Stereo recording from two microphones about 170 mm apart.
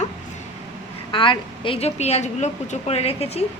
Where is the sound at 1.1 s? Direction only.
30° left (ahead or behind).